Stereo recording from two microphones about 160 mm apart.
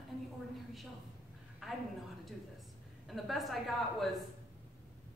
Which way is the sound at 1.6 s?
Centre (ahead or behind).